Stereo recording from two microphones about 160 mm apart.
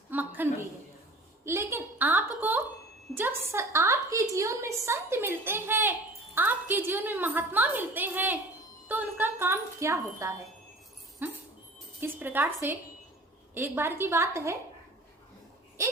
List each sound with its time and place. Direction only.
0.1 s a sound: 10° right (ahead or behind)
1.5 s a woman's voice: 15° right (ahead or behind)
11.2 s dog: 10° right (ahead or behind)
11.9 s a woman's voice: 15° right (ahead or behind)
13.5 s a woman's voice: 15° right (ahead or behind)